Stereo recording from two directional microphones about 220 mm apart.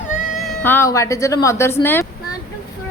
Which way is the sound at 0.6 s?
10° left (ahead or behind).